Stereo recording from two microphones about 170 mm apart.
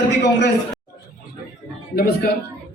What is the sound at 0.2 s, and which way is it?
Speech, 90° left.